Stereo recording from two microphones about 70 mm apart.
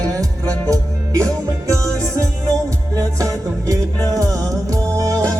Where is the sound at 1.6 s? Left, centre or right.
Right.